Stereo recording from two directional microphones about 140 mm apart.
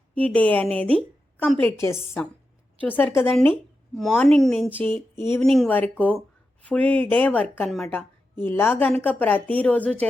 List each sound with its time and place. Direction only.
0.1 s a woman's voice: 10° left (ahead or behind)